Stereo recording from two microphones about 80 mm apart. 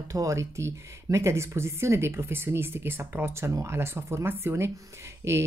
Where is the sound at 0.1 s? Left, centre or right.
Right.